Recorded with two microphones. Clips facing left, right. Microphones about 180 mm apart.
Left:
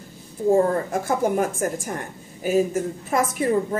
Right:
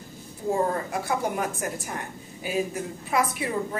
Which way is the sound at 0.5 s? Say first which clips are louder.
Left 7 dB; 50° left (ahead or behind).